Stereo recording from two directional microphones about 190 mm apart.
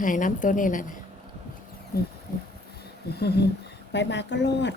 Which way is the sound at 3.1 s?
60° left (ahead or behind).